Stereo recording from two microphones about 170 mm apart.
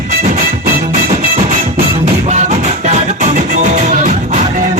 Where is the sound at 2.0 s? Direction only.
40° right (ahead or behind).